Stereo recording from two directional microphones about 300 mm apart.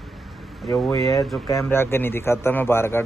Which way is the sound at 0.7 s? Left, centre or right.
Centre.